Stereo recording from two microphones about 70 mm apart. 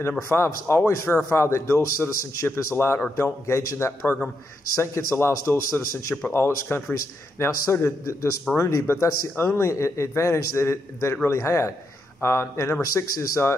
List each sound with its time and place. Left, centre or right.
0.3 s a man's voice: left
9.7 s a man's voice: left